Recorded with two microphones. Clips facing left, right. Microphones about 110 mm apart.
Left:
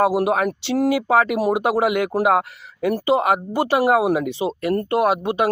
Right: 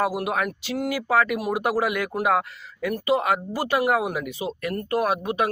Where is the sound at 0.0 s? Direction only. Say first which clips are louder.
Left 6 dB; 30° left (ahead or behind).